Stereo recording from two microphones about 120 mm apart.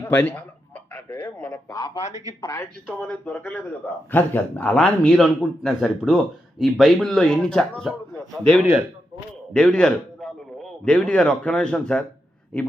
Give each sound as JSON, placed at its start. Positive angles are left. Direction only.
{"t": 0.0, "sound": "a man's voice", "side_deg": 10}
{"t": 1.7, "sound": "speech", "side_deg": 30}
{"t": 2.6, "sound": "a man's voice", "side_deg": 10}